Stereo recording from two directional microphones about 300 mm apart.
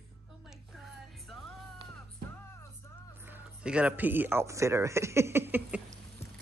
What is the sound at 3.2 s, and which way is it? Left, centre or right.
A man's voice, centre.